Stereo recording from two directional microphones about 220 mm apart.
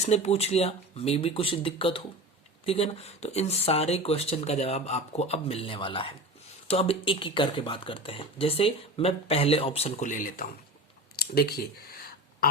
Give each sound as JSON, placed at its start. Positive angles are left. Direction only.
{"t": 0.0, "sound": "speech", "side_deg": 30}